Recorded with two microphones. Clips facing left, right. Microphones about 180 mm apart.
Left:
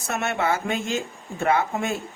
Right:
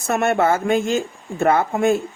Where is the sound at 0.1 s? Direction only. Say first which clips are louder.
Right 7 dB; 50° right (ahead or behind).